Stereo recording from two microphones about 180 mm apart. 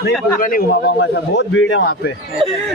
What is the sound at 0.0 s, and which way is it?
Speech, 50° left (ahead or behind).